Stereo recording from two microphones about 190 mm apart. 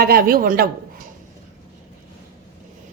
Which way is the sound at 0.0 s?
50° right (ahead or behind).